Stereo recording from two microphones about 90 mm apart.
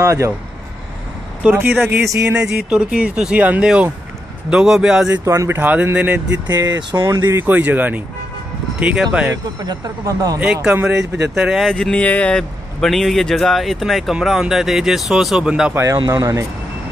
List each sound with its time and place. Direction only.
0.0 s speech: 35° right (ahead or behind)
1.4 s speech: 20° right (ahead or behind)
2.2 s speech: 10° right (ahead or behind)
5.2 s speech: 35° right (ahead or behind)
5.6 s speech: 20° right (ahead or behind)
6.5 s speech: 50° right (ahead or behind)
7.1 s speech: 30° right (ahead or behind)
9.3 s speech: 40° right (ahead or behind)
10.4 s speech: 10° right (ahead or behind)
11.7 s speech: 10° left (ahead or behind); by 15.7 s 10° right (ahead or behind)
15.7 s speech: 30° right (ahead or behind)